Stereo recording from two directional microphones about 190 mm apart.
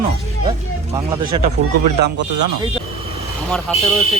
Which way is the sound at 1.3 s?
35° right (ahead or behind).